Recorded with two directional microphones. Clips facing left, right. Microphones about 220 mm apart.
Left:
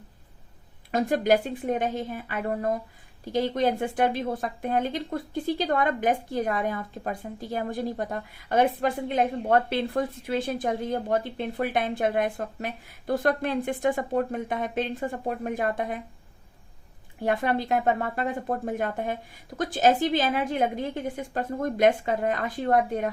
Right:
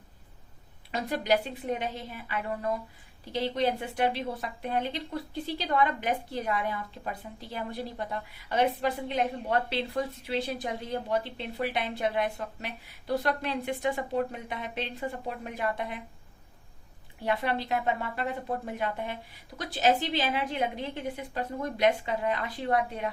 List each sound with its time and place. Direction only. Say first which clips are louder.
0.9 s a woman's voice: left 6 dB; 50° left (ahead or behind)
17.2 s a woman's voice: left 4 dB; 50° left (ahead or behind)